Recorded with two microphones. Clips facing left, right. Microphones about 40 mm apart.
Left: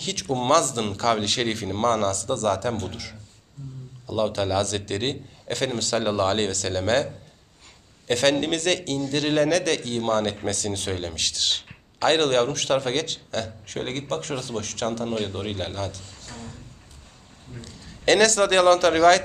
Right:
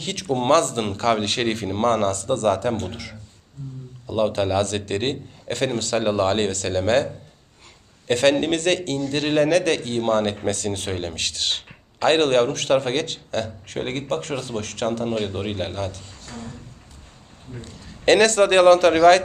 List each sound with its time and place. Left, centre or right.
0.0 s speech: centre
4.1 s a man's voice: centre
15.2 s a man's voice: centre